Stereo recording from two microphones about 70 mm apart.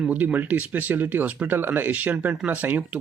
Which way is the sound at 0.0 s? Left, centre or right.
Centre.